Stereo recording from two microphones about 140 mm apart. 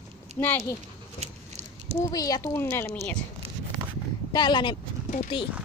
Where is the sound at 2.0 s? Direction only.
25° left (ahead or behind).